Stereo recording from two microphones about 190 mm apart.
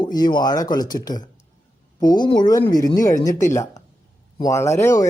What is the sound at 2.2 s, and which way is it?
Speech, 20° left (ahead or behind).